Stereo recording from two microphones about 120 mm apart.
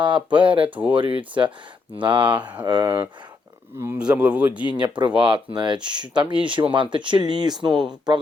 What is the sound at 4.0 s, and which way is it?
Speech, 10° right (ahead or behind).